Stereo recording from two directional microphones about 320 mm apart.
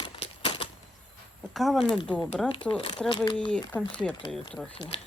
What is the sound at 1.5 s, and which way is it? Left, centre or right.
Speech, centre.